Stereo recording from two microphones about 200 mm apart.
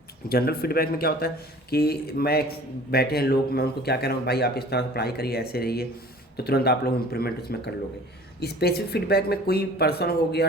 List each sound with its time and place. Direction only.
0.3 s speech: 50° left (ahead or behind)